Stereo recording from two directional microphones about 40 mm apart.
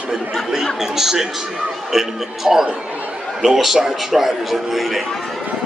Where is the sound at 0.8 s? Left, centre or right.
Centre.